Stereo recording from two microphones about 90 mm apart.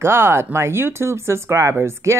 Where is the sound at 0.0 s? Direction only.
30° right (ahead or behind).